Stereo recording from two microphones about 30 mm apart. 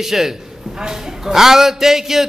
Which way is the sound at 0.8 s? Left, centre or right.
Right.